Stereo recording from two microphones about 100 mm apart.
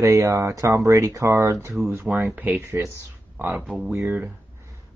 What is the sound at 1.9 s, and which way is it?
Speech, 20° right (ahead or behind).